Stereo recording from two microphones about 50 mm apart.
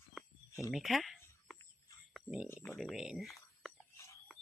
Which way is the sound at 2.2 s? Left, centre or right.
Centre.